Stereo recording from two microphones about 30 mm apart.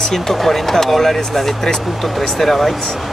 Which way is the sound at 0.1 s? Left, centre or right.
Centre.